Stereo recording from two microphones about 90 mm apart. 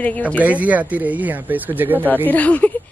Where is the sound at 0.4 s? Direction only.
15° right (ahead or behind).